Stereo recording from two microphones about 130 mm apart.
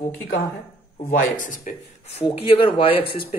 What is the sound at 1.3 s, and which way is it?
Speech, 90° left.